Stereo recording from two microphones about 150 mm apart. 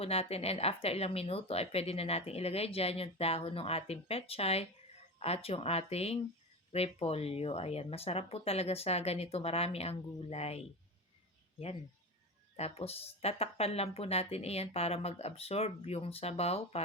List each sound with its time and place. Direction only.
0.0 s speech: 40° left (ahead or behind)
12.5 s speech: 45° left (ahead or behind)